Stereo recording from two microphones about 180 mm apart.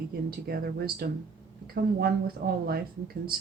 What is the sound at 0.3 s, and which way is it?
Speech, 60° right (ahead or behind).